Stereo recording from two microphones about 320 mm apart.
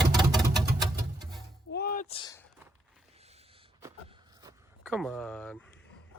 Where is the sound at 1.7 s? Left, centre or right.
Left.